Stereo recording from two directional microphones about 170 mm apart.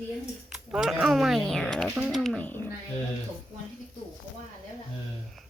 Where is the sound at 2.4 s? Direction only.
10° left (ahead or behind).